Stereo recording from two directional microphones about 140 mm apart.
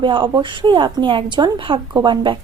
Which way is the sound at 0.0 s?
35° right (ahead or behind).